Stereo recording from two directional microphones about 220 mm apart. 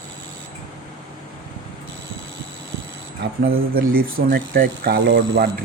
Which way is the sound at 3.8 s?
40° right (ahead or behind).